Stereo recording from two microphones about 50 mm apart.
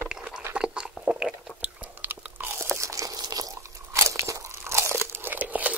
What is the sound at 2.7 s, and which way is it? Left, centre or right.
Crumpling, right.